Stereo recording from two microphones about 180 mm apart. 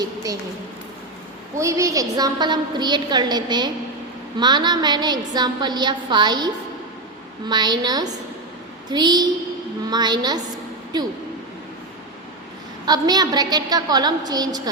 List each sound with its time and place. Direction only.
0.0 s a woman's voice: 20° right (ahead or behind)
1.5 s a woman's voice: 15° right (ahead or behind)
12.8 s a woman's voice: 20° right (ahead or behind)